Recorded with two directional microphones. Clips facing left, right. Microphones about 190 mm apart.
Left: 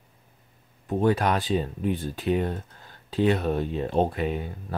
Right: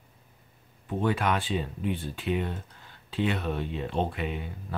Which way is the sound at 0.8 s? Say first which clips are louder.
Left 4 dB; 40° left (ahead or behind).